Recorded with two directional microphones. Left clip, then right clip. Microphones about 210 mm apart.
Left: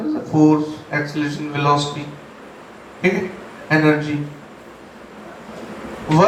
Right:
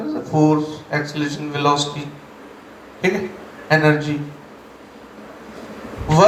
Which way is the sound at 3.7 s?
35° right (ahead or behind).